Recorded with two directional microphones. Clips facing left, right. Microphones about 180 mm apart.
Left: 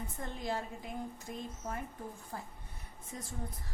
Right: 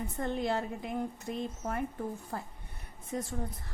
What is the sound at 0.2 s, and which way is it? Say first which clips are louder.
A woman's voice: right 7 dB; 65° right (ahead or behind).